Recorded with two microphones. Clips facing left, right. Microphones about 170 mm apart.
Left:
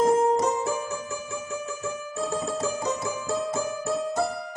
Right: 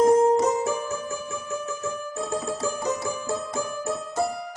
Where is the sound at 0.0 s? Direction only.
20° right (ahead or behind).